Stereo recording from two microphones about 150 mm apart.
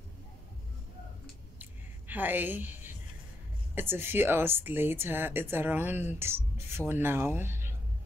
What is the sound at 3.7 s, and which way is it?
Speech, 15° right (ahead or behind).